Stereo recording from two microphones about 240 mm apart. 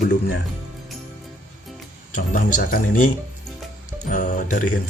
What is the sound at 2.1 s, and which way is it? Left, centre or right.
Speech, left.